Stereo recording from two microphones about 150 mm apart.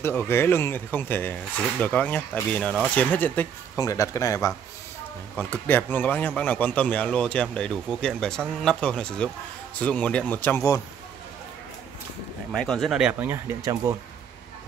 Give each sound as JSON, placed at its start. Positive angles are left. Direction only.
{"t": 0.0, "sound": "speech", "side_deg": 15}
{"t": 3.7, "sound": "speech", "side_deg": 20}
{"t": 12.5, "sound": "speech", "side_deg": 5}
{"t": 13.7, "sound": "speech", "side_deg": -20}